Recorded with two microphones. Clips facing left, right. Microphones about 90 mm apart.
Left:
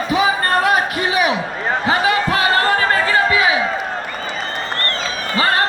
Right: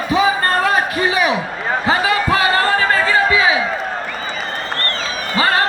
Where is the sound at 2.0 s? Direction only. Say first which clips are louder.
Right 1 dB; 30° left (ahead or behind).